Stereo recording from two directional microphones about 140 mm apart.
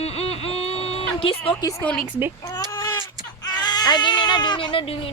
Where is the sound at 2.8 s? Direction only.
30° left (ahead or behind).